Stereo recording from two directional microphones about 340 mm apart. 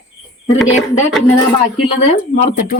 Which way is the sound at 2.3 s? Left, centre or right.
Left.